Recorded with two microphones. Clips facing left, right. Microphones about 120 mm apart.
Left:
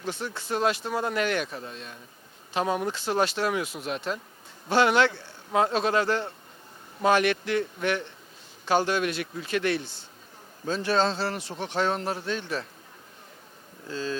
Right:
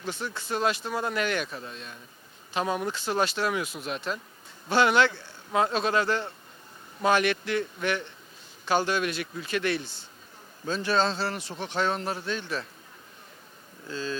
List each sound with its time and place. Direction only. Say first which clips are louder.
0.0 s speech: left 1 dB; 35° left (ahead or behind)
1.2 s a man's voice: left 2 dB; 45° left (ahead or behind)
1.5 s speech: left 1 dB; 30° left (ahead or behind)
4.7 s a man's voice: left 1 dB; 50° left (ahead or behind)
13.8 s speech: left 2 dB; 40° left (ahead or behind)